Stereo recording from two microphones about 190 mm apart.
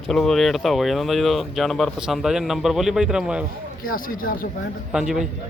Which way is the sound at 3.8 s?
50° left (ahead or behind).